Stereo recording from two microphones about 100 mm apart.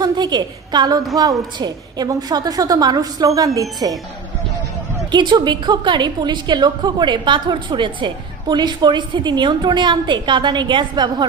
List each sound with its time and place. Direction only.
0.0 s a woman's voice: 45° right (ahead or behind)
5.1 s a woman's voice: 50° right (ahead or behind)